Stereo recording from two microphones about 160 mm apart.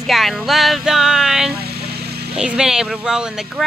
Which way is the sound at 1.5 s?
85° right.